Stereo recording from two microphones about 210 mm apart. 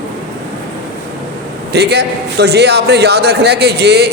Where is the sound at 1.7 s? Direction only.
50° right (ahead or behind).